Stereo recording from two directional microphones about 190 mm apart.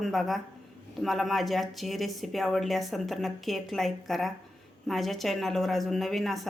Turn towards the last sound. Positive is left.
turn(degrees=0)  # may be behind; listen again after turning